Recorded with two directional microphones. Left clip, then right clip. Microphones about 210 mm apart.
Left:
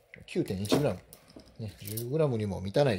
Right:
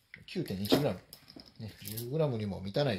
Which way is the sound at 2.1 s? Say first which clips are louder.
Left 4 dB; 50° left (ahead or behind).